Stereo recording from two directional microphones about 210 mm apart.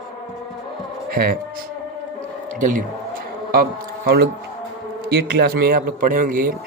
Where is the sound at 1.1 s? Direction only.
45° right (ahead or behind).